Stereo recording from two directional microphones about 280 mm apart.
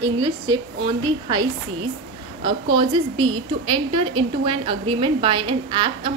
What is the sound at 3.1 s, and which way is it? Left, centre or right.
Speech, right.